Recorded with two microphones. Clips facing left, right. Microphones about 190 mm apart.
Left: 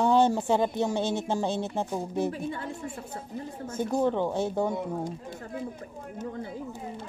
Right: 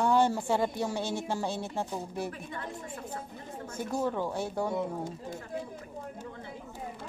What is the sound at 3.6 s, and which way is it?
Speech, 25° left (ahead or behind).